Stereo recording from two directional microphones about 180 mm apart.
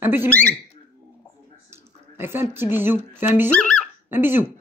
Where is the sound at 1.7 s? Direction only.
15° right (ahead or behind).